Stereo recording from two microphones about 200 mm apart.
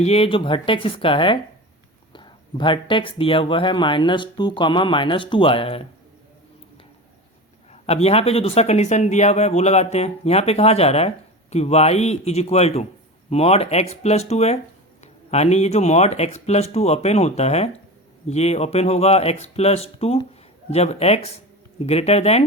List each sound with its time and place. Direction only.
0.0 s speech: 30° left (ahead or behind)
7.7 s speech: 30° left (ahead or behind)